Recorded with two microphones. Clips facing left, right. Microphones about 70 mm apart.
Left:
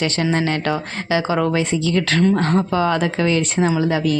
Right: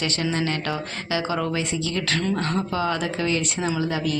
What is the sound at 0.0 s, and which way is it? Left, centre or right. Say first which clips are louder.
Speech: left 5 dB; left.